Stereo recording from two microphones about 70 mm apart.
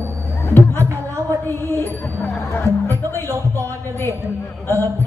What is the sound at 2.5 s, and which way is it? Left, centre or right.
Speech, left.